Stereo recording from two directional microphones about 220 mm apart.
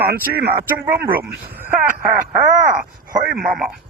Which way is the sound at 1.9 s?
35° right (ahead or behind).